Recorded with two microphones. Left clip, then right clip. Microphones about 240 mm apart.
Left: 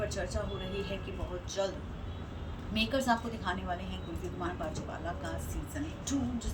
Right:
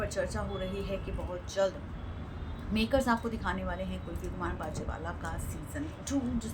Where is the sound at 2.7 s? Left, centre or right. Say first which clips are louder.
Right 1 dB; centre.